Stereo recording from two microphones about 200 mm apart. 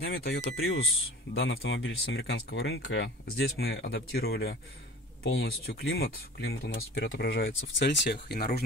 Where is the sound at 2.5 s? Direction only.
55° left (ahead or behind).